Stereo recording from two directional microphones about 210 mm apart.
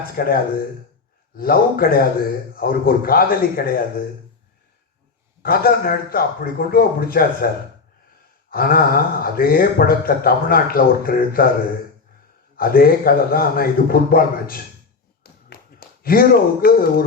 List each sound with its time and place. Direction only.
0.2 s speech: 45° left (ahead or behind)
1.4 s speech: 45° left (ahead or behind)
5.4 s speech: 45° left (ahead or behind)
12.5 s speech: 45° left (ahead or behind)
15.2 s a sound: 45° left (ahead or behind)